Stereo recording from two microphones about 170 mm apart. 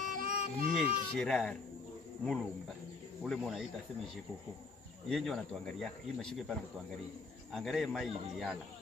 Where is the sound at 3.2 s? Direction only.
Centre (ahead or behind).